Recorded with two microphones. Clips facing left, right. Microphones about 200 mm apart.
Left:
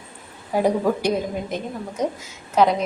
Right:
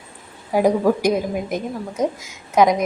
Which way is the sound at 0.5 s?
10° right (ahead or behind).